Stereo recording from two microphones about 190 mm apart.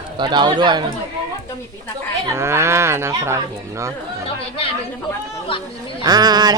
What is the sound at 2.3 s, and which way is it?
Speech, 15° right (ahead or behind).